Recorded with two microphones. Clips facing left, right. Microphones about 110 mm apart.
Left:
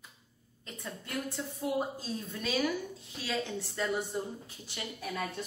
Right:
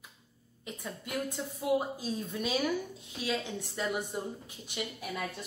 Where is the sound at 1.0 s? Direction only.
15° right (ahead or behind).